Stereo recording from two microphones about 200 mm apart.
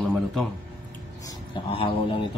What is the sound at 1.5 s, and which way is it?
Speech, 25° left (ahead or behind).